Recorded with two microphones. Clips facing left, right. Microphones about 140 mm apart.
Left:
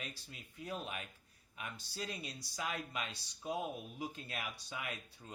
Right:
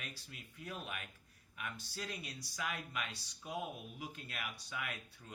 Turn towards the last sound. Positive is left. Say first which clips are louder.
# even
turn(degrees=25)  # may be behind; listen again after turning